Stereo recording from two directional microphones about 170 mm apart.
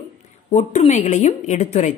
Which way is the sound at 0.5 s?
45° left (ahead or behind).